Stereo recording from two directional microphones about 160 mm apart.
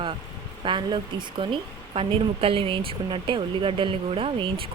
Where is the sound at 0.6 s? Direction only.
30° right (ahead or behind).